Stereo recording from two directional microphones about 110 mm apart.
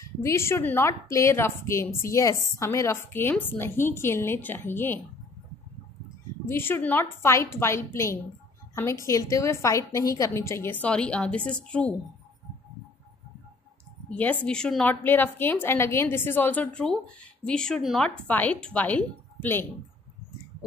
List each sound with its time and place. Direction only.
0.0 s a woman's voice: 25° left (ahead or behind)
6.4 s a woman's voice: 20° left (ahead or behind)
14.0 s a woman's voice: 15° left (ahead or behind)
15.0 s a woman's voice: 20° left (ahead or behind)